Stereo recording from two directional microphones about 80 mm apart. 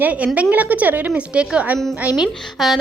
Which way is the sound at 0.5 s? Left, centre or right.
Centre.